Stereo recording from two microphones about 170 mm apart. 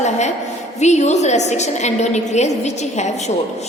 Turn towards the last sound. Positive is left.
turn(degrees=40)  # may be behind; listen again after turning